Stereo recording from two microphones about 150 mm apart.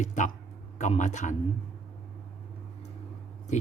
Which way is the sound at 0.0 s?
55° left (ahead or behind).